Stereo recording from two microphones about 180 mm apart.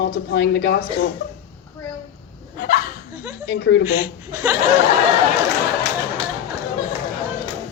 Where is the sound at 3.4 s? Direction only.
70° left (ahead or behind).